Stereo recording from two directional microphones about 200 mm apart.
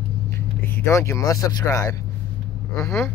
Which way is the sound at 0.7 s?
15° left (ahead or behind).